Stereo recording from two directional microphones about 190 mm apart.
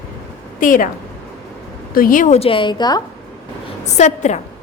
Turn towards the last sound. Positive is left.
turn(degrees=35)  # may be behind; listen again after turning